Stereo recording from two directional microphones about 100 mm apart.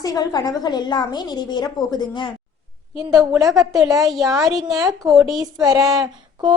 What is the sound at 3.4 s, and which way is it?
Speech, 35° right (ahead or behind).